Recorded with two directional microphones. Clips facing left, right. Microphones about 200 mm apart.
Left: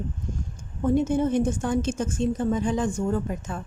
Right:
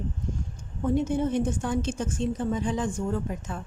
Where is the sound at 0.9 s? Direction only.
45° left (ahead or behind).